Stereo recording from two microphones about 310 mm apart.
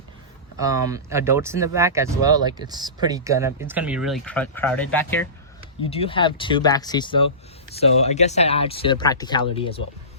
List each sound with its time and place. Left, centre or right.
0.6 s speech: centre
5.9 s speech: centre